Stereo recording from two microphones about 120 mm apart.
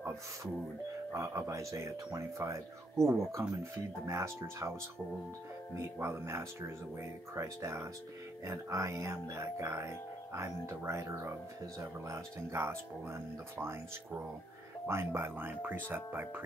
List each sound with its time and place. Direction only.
1.1 s speech: 25° right (ahead or behind)
5.8 s speech: 20° right (ahead or behind)